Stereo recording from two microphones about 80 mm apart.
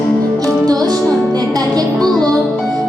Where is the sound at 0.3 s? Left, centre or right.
Right.